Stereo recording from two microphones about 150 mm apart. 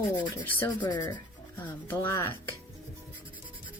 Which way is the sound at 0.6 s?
25° left (ahead or behind).